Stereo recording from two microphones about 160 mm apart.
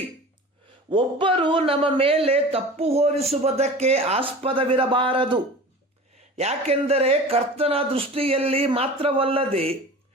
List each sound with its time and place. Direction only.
0.9 s speech: 30° right (ahead or behind)
6.3 s speech: 40° right (ahead or behind)